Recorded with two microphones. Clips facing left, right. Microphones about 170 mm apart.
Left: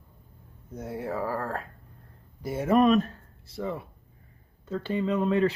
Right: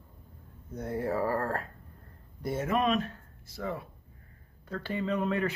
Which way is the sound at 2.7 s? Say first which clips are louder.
Left 8 dB; 40° left (ahead or behind).